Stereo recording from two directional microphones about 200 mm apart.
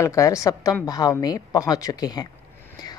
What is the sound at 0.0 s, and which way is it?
A woman's voice, 15° left (ahead or behind).